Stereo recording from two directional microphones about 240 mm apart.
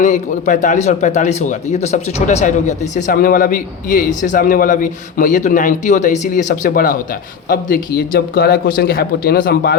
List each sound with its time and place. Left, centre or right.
0.0 s speech: left